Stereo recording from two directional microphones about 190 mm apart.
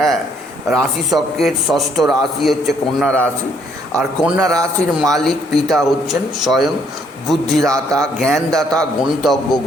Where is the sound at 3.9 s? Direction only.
5° right (ahead or behind).